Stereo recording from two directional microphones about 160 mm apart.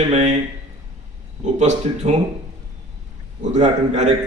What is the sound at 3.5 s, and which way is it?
Speech, 45° right (ahead or behind).